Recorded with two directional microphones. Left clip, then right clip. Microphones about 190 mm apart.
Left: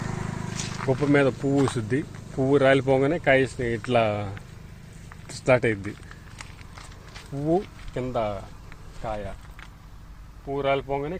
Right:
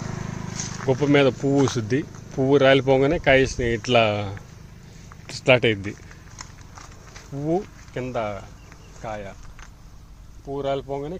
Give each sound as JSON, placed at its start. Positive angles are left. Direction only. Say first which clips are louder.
{"t": 0.0, "sound": "vehicle", "louder": "even", "side_deg": -60}
{"t": 0.9, "sound": "speech", "louder": "right 3 dB", "side_deg": -50}
{"t": 5.3, "sound": "speech", "louder": "right 3 dB", "side_deg": -35}
{"t": 7.3, "sound": "speech", "louder": "even", "side_deg": -15}
{"t": 10.5, "sound": "speech", "louder": "left 1 dB", "side_deg": -15}